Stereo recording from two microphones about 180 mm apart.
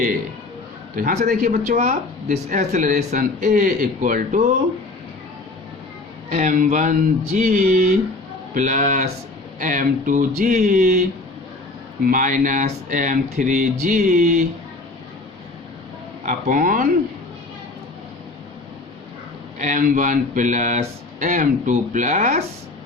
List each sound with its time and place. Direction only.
0.9 s speech: 45° right (ahead or behind)
6.3 s speech: 45° right (ahead or behind)
12.0 s speech: 50° right (ahead or behind)
16.2 s speech: 50° right (ahead or behind)
19.5 s speech: 45° right (ahead or behind)